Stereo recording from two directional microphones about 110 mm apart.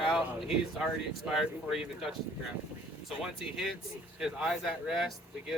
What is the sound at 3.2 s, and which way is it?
Speech, 5° right (ahead or behind).